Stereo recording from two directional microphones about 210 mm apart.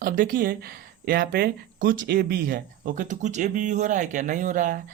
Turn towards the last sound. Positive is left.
turn(degrees=-40)  # may be behind; listen again after turning